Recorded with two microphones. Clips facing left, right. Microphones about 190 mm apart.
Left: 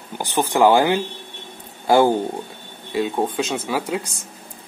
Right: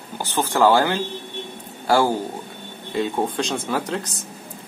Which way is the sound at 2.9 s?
5° left (ahead or behind).